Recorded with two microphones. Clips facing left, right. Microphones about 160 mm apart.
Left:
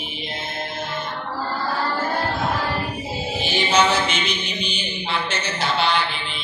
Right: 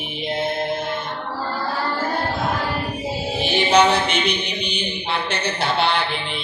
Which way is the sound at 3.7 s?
60° right (ahead or behind).